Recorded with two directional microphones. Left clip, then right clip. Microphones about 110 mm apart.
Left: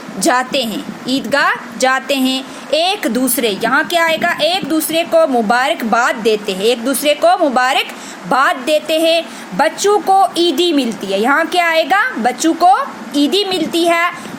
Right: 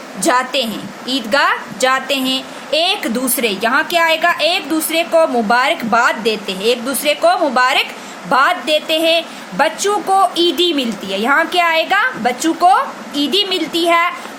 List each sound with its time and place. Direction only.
0.2 s a woman's voice: 45° left (ahead or behind)